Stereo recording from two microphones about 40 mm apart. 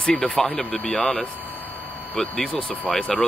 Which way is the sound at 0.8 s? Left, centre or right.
Left.